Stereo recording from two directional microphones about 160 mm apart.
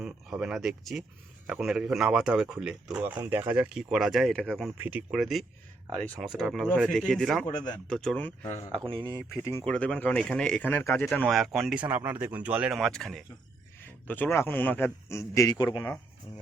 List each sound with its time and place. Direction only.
0.0 s speech: 5° right (ahead or behind)
4.8 s speech: 10° right (ahead or behind)
7.4 s speech: 25° left (ahead or behind)
7.9 s speech: 5° left (ahead or behind)
8.7 s speech: 30° right (ahead or behind)
9.6 s a man's voice: 5° left (ahead or behind)
11.9 s speech: 10° right (ahead or behind)
14.1 s a man's voice: 15° left (ahead or behind)
15.5 s speech: 30° left (ahead or behind)